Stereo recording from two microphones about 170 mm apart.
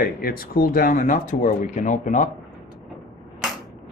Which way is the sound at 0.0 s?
60° left (ahead or behind).